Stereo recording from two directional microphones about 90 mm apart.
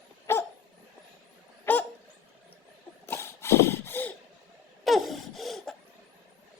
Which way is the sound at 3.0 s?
30° left (ahead or behind).